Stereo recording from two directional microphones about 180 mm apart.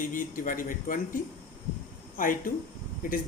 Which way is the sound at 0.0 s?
50° left (ahead or behind).